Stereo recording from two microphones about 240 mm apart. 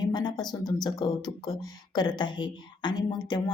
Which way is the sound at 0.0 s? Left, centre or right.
Centre.